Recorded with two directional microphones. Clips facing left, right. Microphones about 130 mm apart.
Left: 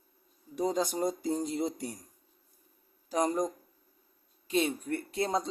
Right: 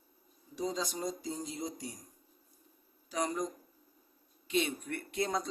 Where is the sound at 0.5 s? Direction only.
55° left (ahead or behind).